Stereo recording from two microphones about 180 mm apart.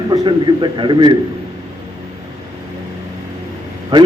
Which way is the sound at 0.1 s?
25° right (ahead or behind).